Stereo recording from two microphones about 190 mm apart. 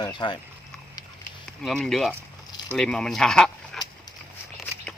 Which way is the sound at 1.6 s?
Centre (ahead or behind).